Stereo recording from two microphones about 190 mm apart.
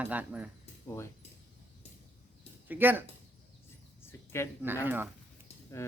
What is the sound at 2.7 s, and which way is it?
Speech, 10° right (ahead or behind).